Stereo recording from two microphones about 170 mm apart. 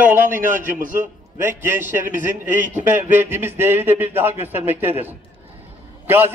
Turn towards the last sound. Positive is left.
turn(degrees=-10)  # may be behind; listen again after turning